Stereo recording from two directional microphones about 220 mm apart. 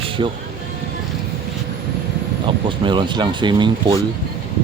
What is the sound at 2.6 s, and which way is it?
Speech, 20° right (ahead or behind).